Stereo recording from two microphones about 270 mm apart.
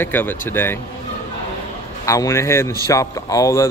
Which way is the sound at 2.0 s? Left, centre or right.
Centre.